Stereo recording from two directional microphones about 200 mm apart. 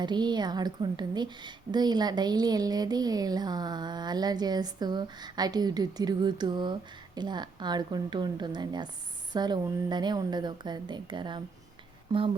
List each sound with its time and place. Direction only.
0.0 s a woman's voice: 20° right (ahead or behind)